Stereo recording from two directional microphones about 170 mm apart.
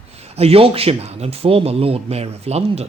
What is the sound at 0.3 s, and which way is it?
Speech, 35° right (ahead or behind).